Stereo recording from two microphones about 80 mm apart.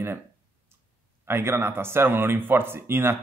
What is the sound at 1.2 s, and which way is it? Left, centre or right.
A man's voice, right.